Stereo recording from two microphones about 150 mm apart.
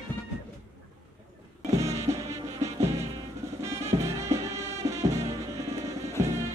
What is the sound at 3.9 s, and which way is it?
Music, 20° right (ahead or behind).